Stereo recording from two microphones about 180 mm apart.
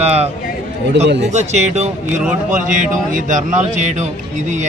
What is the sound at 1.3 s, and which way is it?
Speech, 40° right (ahead or behind).